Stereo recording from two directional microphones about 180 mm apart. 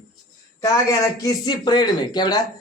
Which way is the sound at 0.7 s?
20° left (ahead or behind).